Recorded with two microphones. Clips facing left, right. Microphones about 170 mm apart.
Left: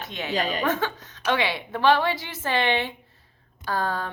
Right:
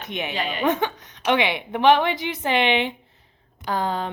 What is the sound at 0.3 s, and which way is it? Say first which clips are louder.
Speech: left 5 dB; 40° left (ahead or behind).